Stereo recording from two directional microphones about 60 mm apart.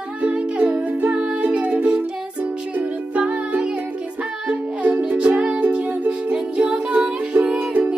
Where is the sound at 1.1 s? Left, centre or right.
Centre.